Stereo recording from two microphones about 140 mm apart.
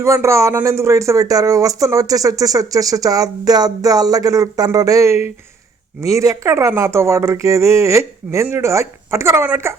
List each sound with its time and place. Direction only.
0.0 s speech: 20° right (ahead or behind)